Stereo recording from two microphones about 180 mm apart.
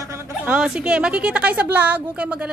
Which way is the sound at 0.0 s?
15° right (ahead or behind).